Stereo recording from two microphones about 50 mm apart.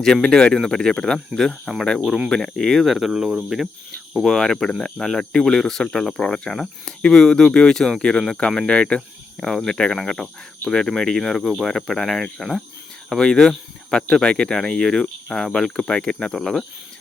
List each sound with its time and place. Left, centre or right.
0.0 s speech: centre
2.8 s speech: centre
4.3 s speech: centre
9.4 s speech: centre
16.3 s speech: centre